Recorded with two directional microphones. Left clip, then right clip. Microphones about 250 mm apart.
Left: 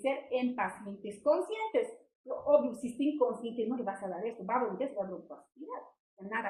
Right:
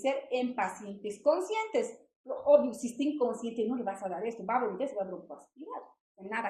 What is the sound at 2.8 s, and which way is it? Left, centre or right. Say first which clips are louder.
A woman's voice: even; right.